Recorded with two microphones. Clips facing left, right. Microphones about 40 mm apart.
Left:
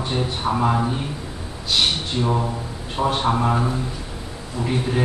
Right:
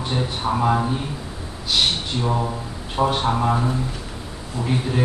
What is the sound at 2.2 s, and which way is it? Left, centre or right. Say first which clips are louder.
A man's voice: left 1 dB; centre.